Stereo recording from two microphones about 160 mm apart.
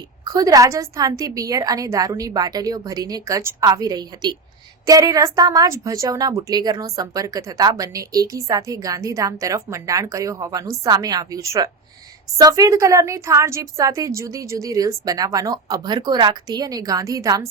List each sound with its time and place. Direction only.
0.3 s a woman's voice: 20° right (ahead or behind)